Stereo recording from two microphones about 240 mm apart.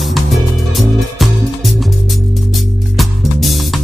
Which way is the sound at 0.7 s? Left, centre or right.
Centre.